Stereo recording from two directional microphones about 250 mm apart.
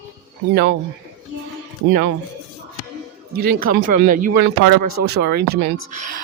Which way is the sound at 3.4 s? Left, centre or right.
Right.